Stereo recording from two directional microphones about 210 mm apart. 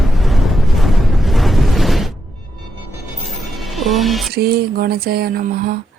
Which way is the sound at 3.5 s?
Centre (ahead or behind).